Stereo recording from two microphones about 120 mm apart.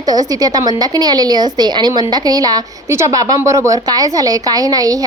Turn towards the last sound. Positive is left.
turn(degrees=-30)  # may be behind; listen again after turning